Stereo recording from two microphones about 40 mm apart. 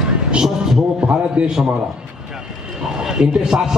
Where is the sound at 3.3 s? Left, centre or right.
Centre.